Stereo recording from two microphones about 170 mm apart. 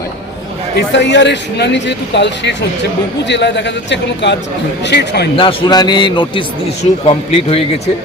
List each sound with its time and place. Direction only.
0.8 s a man's voice: 90° left
5.4 s a man's voice: 30° left (ahead or behind)